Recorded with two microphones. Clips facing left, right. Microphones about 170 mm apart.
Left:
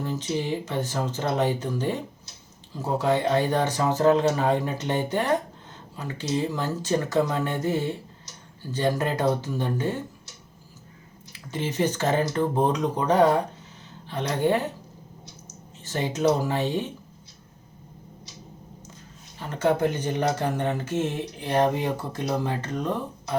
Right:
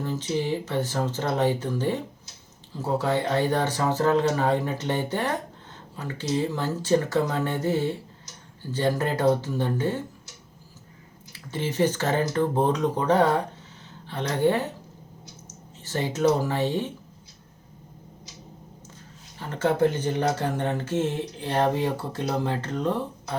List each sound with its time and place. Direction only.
0.1 s speech: 15° left (ahead or behind)
11.5 s speech: 15° left (ahead or behind)
19.4 s speech: 15° left (ahead or behind)